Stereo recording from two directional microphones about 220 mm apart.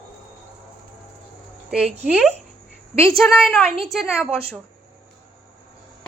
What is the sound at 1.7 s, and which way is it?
A woman's voice, centre (ahead or behind).